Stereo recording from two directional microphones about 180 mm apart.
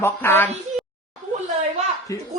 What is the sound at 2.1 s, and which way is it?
Speech, 15° left (ahead or behind).